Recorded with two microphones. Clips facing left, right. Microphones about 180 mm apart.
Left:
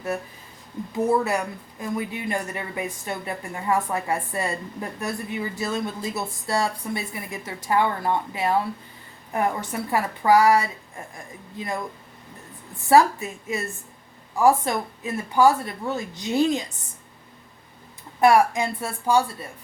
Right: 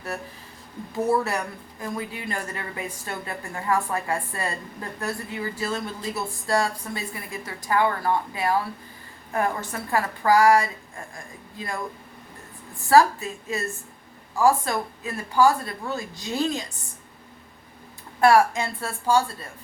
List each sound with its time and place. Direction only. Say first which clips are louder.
0.9 s a woman's voice: left 2 dB; 20° left (ahead or behind)
12.9 s a woman's voice: even; 20° left (ahead or behind)
18.2 s speech: even; 15° left (ahead or behind)